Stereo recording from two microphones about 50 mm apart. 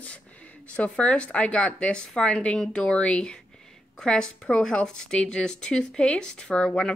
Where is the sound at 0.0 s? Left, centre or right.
Left.